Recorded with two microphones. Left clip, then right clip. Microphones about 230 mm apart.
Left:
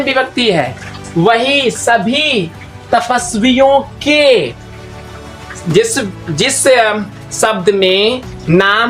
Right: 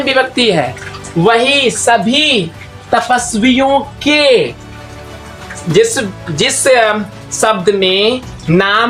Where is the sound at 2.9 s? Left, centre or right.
Centre.